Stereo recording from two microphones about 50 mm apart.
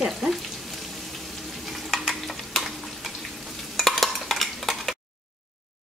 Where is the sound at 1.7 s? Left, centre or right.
Centre.